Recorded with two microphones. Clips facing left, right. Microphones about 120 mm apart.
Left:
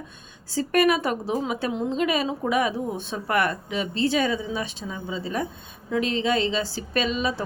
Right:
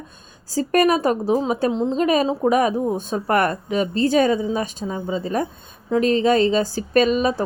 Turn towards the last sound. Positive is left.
turn(degrees=-45)  # may be behind; listen again after turning